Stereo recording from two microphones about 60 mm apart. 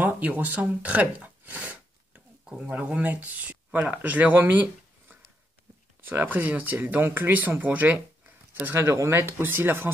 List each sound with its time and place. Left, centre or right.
0.0 s speech: right
2.7 s speech: right
8.7 s speech: right